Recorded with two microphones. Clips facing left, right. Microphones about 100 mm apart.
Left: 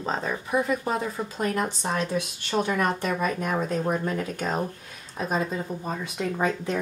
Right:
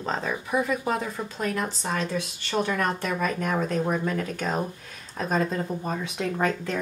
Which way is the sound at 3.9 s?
25° left (ahead or behind).